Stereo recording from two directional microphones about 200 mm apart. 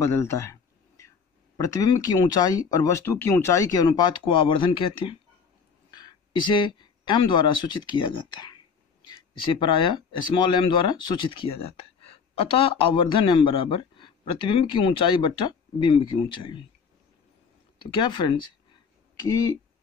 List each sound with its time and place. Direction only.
0.0 s a sound: 15° left (ahead or behind)
1.6 s speech: 20° left (ahead or behind)
18.0 s speech: 25° left (ahead or behind)